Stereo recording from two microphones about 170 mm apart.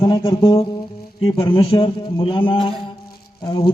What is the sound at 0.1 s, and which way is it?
A man's voice, 30° left (ahead or behind).